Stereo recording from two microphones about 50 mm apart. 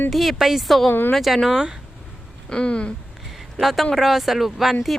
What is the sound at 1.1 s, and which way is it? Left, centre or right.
Speech, centre.